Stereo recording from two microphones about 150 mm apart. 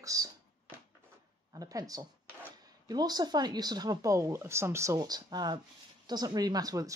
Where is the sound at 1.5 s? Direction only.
25° right (ahead or behind).